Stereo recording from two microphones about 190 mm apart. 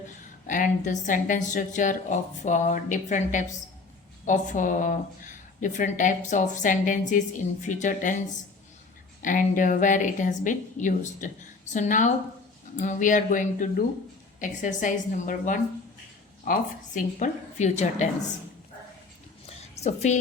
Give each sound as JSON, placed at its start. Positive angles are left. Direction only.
{"t": 0.4, "sound": "a woman's voice", "side_deg": 45}
{"t": 9.2, "sound": "a woman's voice", "side_deg": 45}
{"t": 19.5, "sound": "a sound", "side_deg": 35}